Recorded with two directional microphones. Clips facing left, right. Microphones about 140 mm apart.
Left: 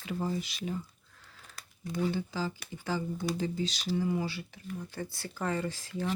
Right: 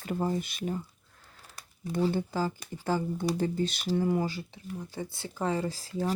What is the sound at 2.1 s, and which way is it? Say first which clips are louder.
Speech: right 4 dB; 50° right (ahead or behind).